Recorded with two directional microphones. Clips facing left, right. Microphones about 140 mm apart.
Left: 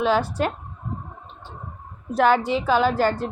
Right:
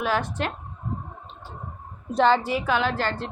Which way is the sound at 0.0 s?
30° left (ahead or behind).